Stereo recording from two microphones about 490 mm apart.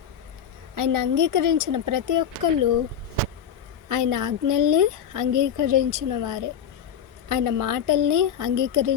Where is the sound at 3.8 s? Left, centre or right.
Right.